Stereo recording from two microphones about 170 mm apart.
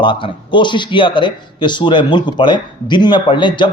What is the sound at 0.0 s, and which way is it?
A man's voice, 30° left (ahead or behind).